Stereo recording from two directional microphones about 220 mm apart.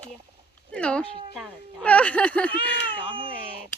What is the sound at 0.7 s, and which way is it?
Speech, 5° left (ahead or behind).